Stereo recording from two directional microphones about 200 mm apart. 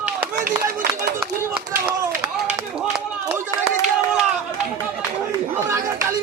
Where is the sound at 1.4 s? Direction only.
10° right (ahead or behind).